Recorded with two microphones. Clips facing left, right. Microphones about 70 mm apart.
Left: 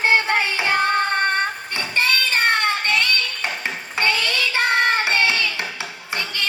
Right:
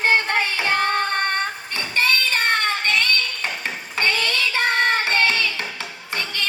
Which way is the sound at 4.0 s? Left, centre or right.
Centre.